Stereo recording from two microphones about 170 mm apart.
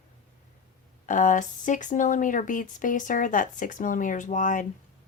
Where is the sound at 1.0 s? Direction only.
50° left (ahead or behind).